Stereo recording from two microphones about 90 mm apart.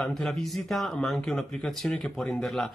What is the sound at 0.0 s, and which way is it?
Speech, 5° left (ahead or behind).